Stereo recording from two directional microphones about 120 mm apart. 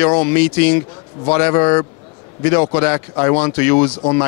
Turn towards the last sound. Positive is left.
turn(degrees=25)  # may be behind; listen again after turning